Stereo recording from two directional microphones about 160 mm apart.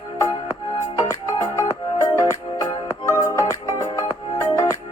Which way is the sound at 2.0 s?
20° left (ahead or behind).